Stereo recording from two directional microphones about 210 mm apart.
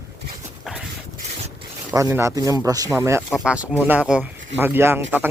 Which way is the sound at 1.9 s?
15° right (ahead or behind).